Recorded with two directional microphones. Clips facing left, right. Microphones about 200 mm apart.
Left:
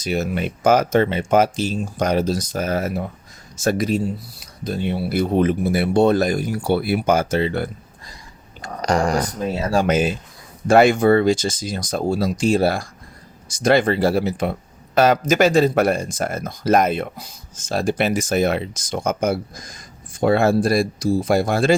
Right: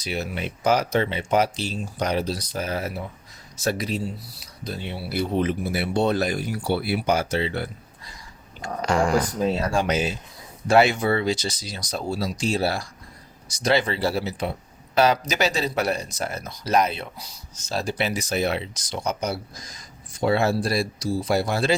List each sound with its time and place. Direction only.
0.0 s speech: 45° left (ahead or behind)
9.7 s speech: 50° left (ahead or behind)